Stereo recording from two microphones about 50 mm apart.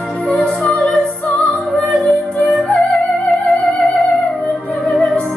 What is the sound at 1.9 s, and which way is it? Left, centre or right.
Music, centre.